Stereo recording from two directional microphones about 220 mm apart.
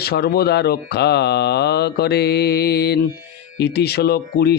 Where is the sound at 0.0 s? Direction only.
45° left (ahead or behind).